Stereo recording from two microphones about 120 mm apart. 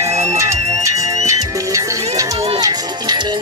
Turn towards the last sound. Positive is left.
turn(degrees=-35)  # may be behind; listen again after turning